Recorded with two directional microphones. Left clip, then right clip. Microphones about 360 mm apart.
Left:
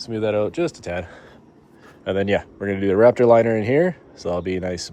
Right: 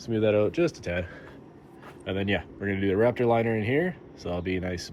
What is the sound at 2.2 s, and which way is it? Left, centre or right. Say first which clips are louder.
Speech: left 6 dB; centre.